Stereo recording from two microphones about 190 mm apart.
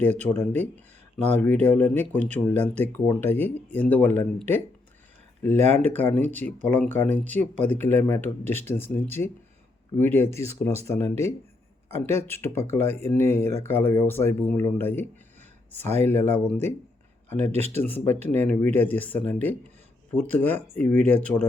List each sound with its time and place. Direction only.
0.0 s speech: 10° left (ahead or behind)
5.5 s speech: 35° right (ahead or behind)
5.9 s speech: 10° left (ahead or behind)
12.0 s speech: 10° left (ahead or behind)
16.0 s speech: 10° left (ahead or behind)
17.3 s speech: 35° right (ahead or behind)
17.7 s speech: 10° left (ahead or behind)